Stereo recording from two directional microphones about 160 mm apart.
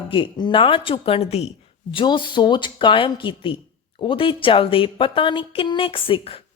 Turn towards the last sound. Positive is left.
turn(degrees=35)  # may be behind; listen again after turning